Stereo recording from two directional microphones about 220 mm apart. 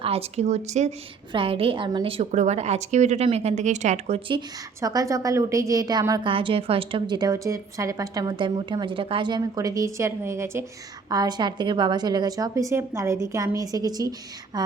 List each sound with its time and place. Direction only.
0.0 s a woman's voice: 25° right (ahead or behind)